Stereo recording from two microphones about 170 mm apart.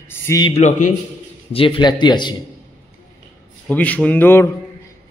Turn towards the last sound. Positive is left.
turn(degrees=15)  # may be behind; listen again after turning